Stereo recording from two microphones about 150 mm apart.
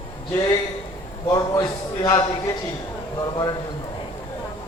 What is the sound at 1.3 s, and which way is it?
Speech, 20° left (ahead or behind).